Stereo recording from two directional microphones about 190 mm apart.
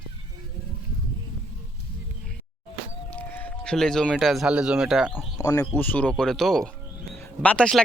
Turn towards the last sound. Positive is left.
turn(degrees=5)  # may be behind; listen again after turning